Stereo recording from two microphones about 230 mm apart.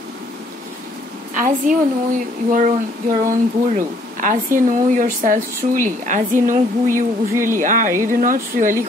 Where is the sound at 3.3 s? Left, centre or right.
Right.